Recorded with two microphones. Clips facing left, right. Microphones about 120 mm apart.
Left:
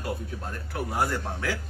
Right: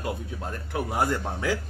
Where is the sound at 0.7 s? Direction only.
20° right (ahead or behind).